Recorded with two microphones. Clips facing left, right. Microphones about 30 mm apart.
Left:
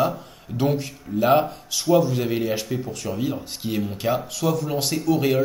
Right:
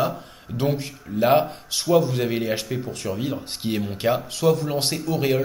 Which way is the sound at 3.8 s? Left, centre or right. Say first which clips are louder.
Even; centre.